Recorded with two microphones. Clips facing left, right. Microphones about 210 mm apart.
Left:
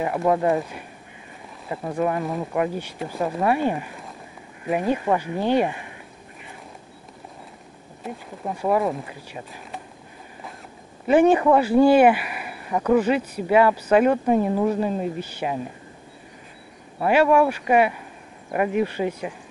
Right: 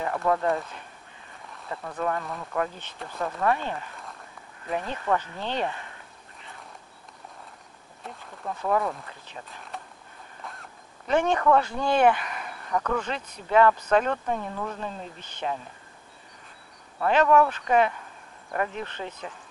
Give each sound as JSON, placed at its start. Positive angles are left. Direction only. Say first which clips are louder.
{"t": 0.0, "sound": "speech", "louder": "left 5 dB", "side_deg": 15}
{"t": 2.0, "sound": "speech", "louder": "left 5 dB", "side_deg": 15}
{"t": 2.2, "sound": "speech", "louder": "left 9 dB", "side_deg": 30}
{"t": 2.5, "sound": "speech", "louder": "left 2 dB", "side_deg": 10}
{"t": 8.1, "sound": "speech", "louder": "left 5 dB", "side_deg": 15}
{"t": 10.4, "sound": "zipper", "louder": "left 2 dB", "side_deg": 0}
{"t": 11.4, "sound": "speech", "louder": "left 7 dB", "side_deg": 10}
{"t": 17.0, "sound": "speech", "louder": "left 3 dB", "side_deg": 10}